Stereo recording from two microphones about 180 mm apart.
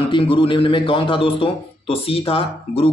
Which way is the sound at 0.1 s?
30° left (ahead or behind).